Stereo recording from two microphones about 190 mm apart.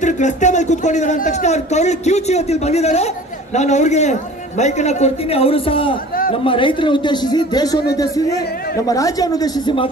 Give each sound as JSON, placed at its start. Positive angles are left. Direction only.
{"t": 0.0, "sound": "a man's voice", "side_deg": 40}